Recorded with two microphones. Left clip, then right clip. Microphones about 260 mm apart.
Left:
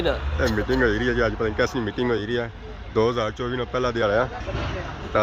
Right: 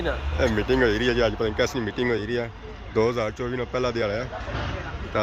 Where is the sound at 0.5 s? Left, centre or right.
Centre.